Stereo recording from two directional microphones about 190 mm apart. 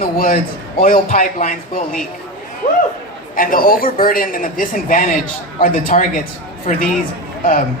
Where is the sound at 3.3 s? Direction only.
50° left (ahead or behind).